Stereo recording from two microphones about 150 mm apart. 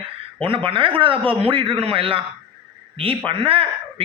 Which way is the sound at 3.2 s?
35° right (ahead or behind).